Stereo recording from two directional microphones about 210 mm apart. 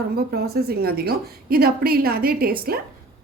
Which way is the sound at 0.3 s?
50° right (ahead or behind).